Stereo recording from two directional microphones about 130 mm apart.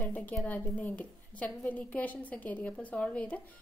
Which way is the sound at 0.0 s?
10° left (ahead or behind).